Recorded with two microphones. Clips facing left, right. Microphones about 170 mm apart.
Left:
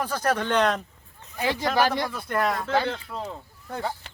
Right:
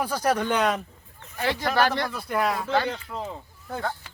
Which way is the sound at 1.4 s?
10° left (ahead or behind).